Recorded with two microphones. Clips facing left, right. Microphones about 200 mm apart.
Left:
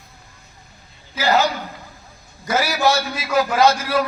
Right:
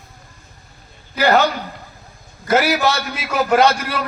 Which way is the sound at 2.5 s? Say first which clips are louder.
Right 2 dB; 65° right (ahead or behind).